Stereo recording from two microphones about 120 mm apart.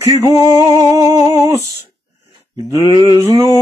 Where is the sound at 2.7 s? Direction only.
30° right (ahead or behind).